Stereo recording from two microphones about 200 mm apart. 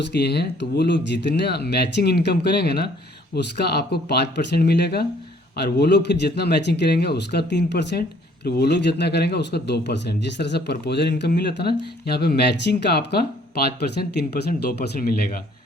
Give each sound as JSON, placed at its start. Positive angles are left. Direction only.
{"t": 0.1, "sound": "speech", "side_deg": 55}